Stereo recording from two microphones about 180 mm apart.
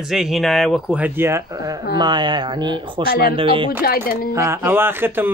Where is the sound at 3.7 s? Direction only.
55° left (ahead or behind).